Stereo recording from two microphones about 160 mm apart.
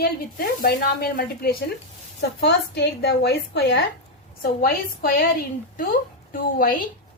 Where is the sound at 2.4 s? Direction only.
90° left.